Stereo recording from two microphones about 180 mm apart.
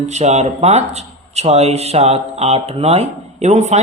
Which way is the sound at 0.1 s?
40° right (ahead or behind).